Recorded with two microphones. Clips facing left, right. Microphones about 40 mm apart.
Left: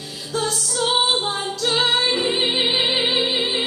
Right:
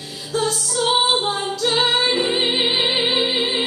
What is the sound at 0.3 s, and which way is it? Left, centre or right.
Music, centre.